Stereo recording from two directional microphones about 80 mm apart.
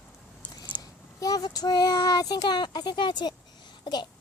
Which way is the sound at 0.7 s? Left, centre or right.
Centre.